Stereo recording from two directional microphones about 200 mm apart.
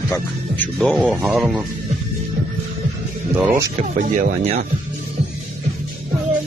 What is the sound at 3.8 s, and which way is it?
Speech, 35° right (ahead or behind).